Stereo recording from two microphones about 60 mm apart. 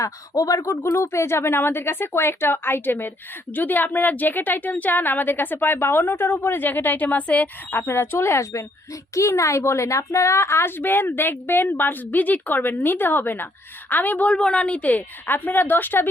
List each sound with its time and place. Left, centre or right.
0.0 s a woman's voice: left